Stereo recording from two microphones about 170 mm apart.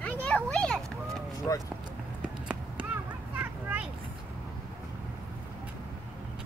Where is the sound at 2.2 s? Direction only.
5° right (ahead or behind).